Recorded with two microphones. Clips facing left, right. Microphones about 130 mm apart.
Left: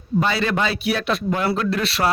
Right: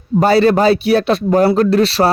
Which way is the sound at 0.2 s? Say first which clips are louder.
Right 10 dB; 40° right (ahead or behind).